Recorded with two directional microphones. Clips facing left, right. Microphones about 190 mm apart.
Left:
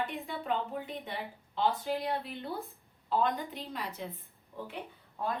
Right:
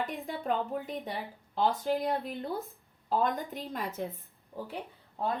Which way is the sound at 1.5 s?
45° right (ahead or behind).